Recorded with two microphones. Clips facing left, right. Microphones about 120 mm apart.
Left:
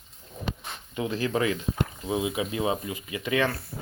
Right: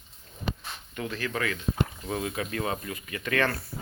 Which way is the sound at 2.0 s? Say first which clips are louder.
Left 4 dB; 10° left (ahead or behind).